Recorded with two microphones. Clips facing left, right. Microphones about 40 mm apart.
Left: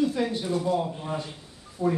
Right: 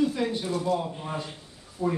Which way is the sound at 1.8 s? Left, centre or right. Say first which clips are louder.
Left 2 dB; left.